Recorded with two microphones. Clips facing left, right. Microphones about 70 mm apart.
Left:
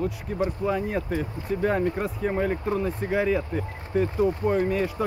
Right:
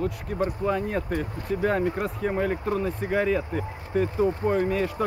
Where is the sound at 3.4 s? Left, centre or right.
Centre.